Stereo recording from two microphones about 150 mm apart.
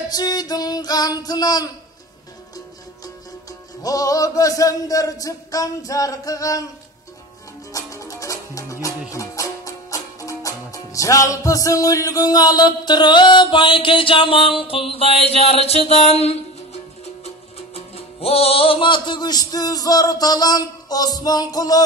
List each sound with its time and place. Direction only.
0.1 s music: 25° left (ahead or behind)
3.8 s music: 25° left (ahead or behind)
7.7 s music: 20° left (ahead or behind); by 16.3 s 45° left (ahead or behind)
17.7 s music: 40° left (ahead or behind); by 21.8 s 25° left (ahead or behind)